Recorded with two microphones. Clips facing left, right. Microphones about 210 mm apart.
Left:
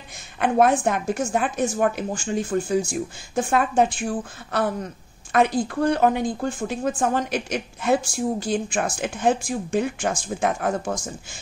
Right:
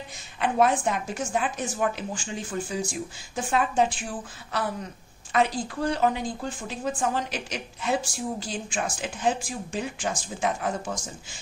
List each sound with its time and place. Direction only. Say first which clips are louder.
0.4 s speech: left 4 dB; 50° left (ahead or behind)
5.3 s speech: left 5 dB; 55° left (ahead or behind)